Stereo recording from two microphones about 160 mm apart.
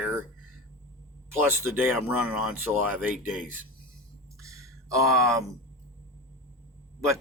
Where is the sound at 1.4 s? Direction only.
15° right (ahead or behind).